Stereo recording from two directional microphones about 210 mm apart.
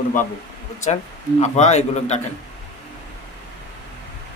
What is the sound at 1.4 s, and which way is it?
Speech, 35° left (ahead or behind).